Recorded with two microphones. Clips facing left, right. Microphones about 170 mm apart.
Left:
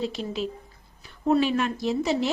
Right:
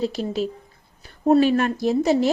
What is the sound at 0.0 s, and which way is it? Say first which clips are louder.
A woman's voice: right 5 dB; 40° right (ahead or behind).